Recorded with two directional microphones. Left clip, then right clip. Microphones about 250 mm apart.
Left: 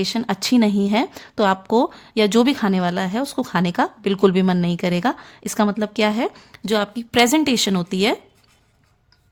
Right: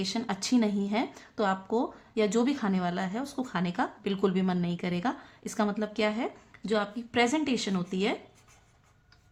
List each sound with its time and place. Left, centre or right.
0.0 s speech: left